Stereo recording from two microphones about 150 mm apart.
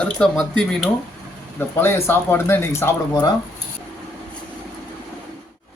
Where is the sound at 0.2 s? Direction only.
5° left (ahead or behind).